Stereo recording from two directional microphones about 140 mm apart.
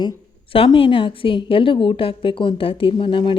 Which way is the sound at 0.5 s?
40° left (ahead or behind).